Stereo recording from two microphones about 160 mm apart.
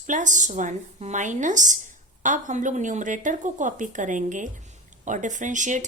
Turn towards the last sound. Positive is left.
turn(degrees=-50)  # may be behind; listen again after turning